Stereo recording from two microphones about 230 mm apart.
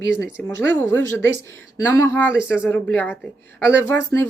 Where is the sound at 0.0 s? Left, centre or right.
Right.